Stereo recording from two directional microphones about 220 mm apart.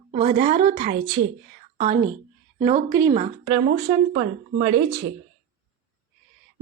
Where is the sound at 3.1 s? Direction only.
25° right (ahead or behind).